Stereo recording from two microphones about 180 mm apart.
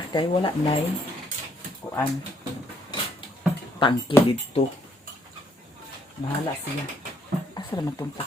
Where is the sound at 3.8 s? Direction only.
25° left (ahead or behind).